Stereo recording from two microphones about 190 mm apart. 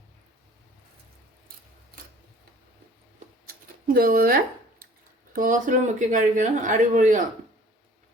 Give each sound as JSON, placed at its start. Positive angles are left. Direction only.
{"t": 3.4, "sound": "scissors", "side_deg": -50}
{"t": 5.3, "sound": "a woman's voice", "side_deg": -45}